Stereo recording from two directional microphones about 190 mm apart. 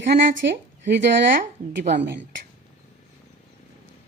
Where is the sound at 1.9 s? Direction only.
65° right (ahead or behind).